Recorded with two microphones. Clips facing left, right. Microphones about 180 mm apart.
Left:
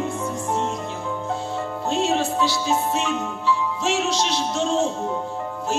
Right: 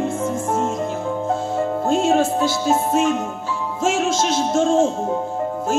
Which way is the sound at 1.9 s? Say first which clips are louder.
Right 4 dB; 50° right (ahead or behind).